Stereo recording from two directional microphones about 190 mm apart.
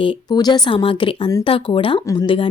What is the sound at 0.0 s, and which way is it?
Speech, 25° left (ahead or behind).